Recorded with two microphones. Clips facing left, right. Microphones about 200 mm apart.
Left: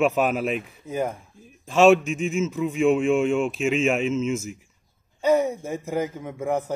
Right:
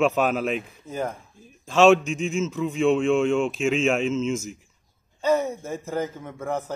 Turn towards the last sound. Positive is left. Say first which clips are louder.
# left 3 dB
turn(degrees=10)  # may be behind; listen again after turning